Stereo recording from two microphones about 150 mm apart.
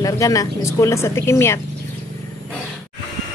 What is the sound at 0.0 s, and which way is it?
A woman's voice, 20° left (ahead or behind).